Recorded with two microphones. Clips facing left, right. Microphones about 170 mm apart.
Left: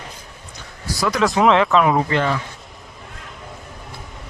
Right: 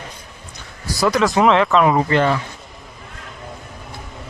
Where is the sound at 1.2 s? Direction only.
Centre (ahead or behind).